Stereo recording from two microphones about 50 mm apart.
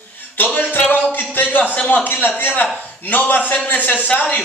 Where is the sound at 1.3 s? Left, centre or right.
Left.